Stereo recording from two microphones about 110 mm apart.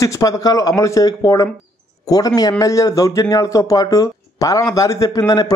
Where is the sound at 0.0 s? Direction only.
30° left (ahead or behind).